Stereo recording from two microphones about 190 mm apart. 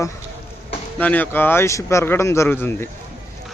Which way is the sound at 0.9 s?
10° left (ahead or behind).